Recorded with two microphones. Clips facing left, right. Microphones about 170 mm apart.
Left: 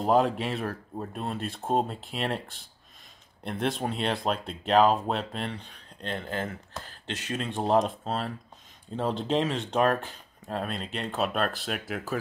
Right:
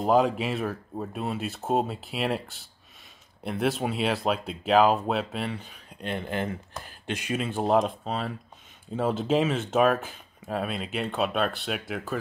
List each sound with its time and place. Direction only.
0.0 s speech: centre (ahead or behind)